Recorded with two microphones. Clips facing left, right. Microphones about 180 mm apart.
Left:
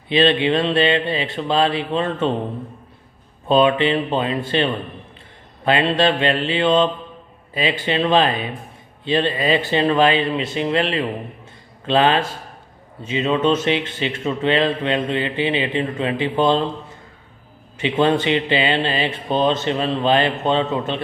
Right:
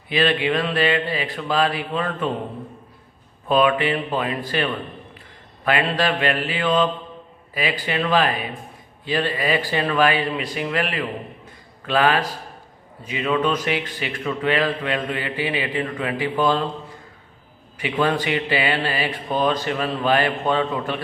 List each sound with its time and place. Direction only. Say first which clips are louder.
0.1 s speech: left 4 dB; 25° left (ahead or behind)
3.4 s speech: left 3 dB; 25° left (ahead or behind)
17.7 s speech: left 4 dB; 25° left (ahead or behind)